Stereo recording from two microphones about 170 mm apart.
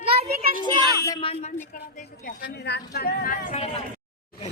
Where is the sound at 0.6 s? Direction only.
20° right (ahead or behind).